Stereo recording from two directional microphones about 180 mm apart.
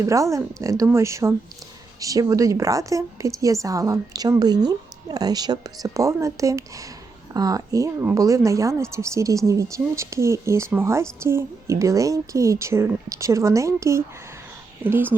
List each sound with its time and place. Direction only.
0.0 s a woman's voice: 15° right (ahead or behind)